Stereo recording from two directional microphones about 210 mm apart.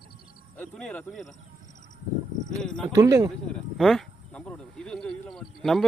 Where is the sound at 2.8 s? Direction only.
15° right (ahead or behind).